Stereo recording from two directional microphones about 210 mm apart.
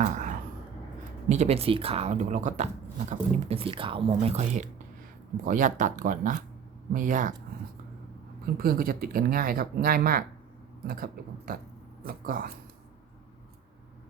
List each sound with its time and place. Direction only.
0.0 s a sound: 35° right (ahead or behind)
1.3 s speech: 30° right (ahead or behind)
8.5 s speech: 45° right (ahead or behind)